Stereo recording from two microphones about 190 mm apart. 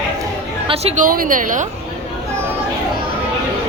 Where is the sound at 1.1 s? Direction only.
45° right (ahead or behind).